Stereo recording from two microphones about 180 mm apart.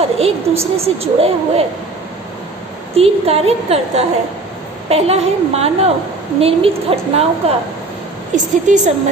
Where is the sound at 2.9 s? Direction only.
35° right (ahead or behind).